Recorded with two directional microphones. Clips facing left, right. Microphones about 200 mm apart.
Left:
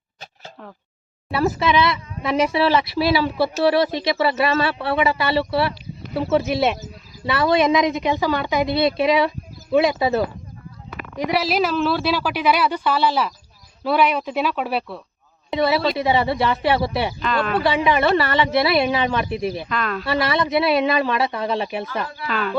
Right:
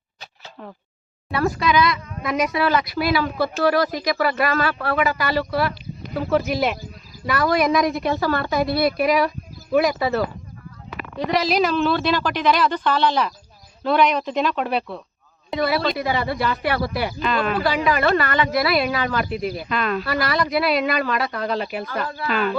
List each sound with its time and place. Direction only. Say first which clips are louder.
1.5 s speech: even; 25° left (ahead or behind)
11.2 s a woman's voice: even; 10° left (ahead or behind)
15.4 s speech: left 2 dB; 25° left (ahead or behind)
17.2 s speech: right 2 dB; 5° right (ahead or behind)
17.6 s speech: left 4 dB; 25° left (ahead or behind)
19.6 s speech: right 2 dB; 10° right (ahead or behind)
20.1 s speech: left 2 dB; 25° left (ahead or behind)
22.3 s speech: right 3 dB; 10° right (ahead or behind)